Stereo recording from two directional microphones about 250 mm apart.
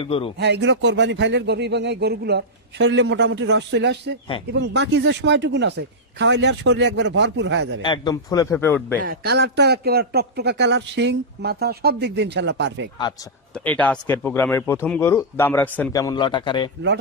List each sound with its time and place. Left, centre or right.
0.0 s speech: left
0.4 s speech: right
7.8 s a man's voice: centre
9.0 s speech: right
13.7 s a man's voice: centre